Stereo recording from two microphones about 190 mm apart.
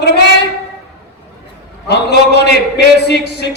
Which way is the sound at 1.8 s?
60° left (ahead or behind).